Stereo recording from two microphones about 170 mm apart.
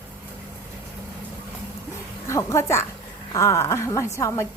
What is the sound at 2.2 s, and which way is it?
A woman's voice, 15° left (ahead or behind).